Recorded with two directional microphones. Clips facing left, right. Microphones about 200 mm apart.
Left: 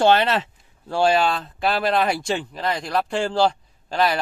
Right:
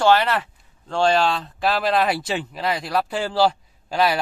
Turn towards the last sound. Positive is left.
turn(degrees=-5)  # may be behind; listen again after turning